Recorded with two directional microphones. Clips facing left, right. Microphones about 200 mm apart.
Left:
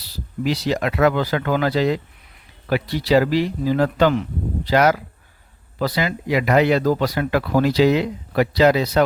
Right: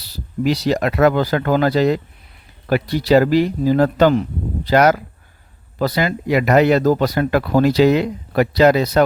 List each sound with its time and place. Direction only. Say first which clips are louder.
0.4 s speech: right 4 dB; 40° right (ahead or behind)